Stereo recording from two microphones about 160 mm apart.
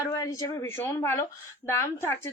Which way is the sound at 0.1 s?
20° left (ahead or behind).